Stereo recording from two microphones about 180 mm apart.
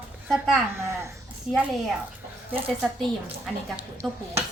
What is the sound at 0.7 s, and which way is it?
Babbling, 15° right (ahead or behind).